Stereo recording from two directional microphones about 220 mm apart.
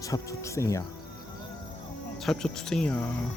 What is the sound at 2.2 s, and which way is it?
Speech, centre (ahead or behind).